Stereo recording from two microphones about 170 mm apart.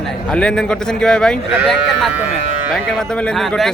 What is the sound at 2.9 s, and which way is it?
Speech, 5° left (ahead or behind).